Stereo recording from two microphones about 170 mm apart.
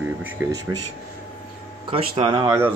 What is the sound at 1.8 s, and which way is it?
Speech, 30° right (ahead or behind).